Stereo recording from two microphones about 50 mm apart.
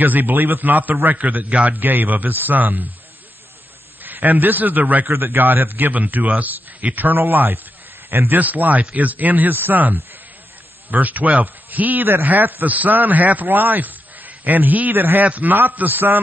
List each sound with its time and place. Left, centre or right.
0.0 s a man's voice: right
1.8 s a man's voice: right
4.0 s a man's voice: right
5.0 s a man's voice: right
5.4 s a man's voice: right
8.3 s a man's voice: right
11.0 s a man's voice: right
15.2 s a man's voice: right